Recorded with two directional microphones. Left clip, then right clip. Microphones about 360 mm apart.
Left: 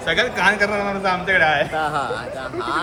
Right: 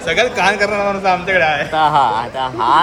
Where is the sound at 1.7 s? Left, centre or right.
Right.